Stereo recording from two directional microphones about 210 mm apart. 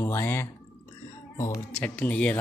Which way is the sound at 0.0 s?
10° left (ahead or behind).